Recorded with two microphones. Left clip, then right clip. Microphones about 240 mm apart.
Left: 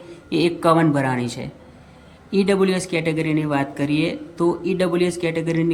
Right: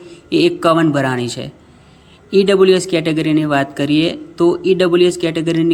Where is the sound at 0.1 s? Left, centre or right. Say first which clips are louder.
Right 6 dB; centre.